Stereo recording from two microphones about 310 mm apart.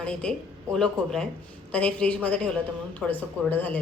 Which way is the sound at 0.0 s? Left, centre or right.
Centre.